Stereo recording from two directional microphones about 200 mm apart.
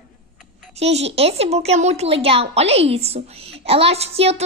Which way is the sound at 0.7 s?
30° right (ahead or behind).